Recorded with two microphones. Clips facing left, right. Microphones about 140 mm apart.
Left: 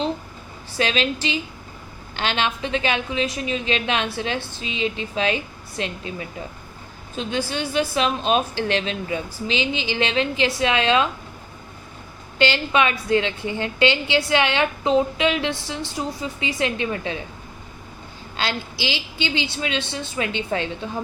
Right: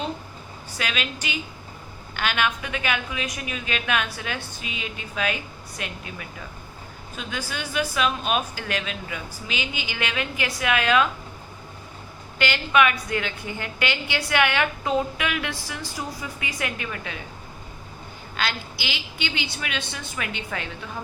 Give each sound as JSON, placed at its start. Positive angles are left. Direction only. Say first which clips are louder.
{"t": 0.8, "sound": "a woman's voice", "louder": "left 8 dB", "side_deg": 30}
{"t": 12.4, "sound": "a woman's voice", "louder": "left 1 dB", "side_deg": 25}
{"t": 18.3, "sound": "a woman's voice", "louder": "left 3 dB", "side_deg": 25}